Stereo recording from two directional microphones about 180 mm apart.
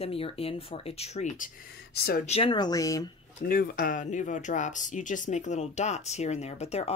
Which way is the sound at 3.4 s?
55° left (ahead or behind).